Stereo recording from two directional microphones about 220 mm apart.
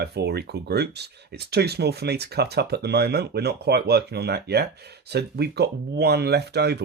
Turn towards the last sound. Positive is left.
turn(degrees=-50)  # may be behind; listen again after turning